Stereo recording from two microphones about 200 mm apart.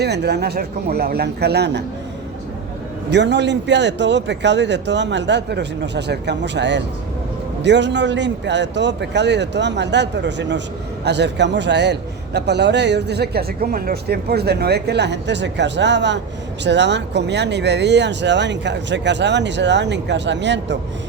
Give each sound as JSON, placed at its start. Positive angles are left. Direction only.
{"t": 0.0, "sound": "a man's voice", "side_deg": -55}
{"t": 3.1, "sound": "a man's voice", "side_deg": -60}